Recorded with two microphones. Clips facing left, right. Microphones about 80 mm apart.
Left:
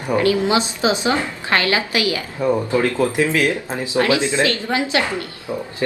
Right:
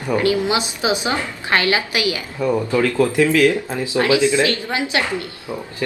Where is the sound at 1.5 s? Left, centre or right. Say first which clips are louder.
Right 1 dB; right.